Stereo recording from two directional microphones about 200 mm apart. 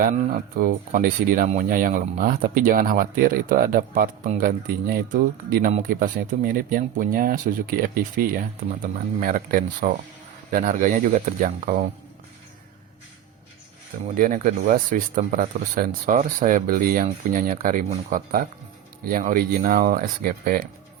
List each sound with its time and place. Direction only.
0.0 s speech: 45° right (ahead or behind)
14.2 s speech: 40° right (ahead or behind)